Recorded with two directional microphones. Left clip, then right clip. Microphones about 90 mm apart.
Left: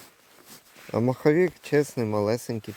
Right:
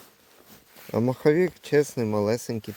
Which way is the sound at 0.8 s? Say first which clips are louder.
Right 1 dB; 25° right (ahead or behind).